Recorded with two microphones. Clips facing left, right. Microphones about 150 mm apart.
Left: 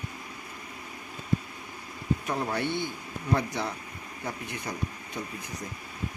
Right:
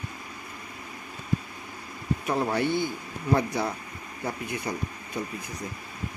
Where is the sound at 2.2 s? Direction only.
20° right (ahead or behind).